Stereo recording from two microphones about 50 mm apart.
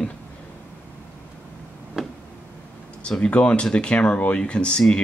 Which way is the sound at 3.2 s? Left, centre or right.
Left.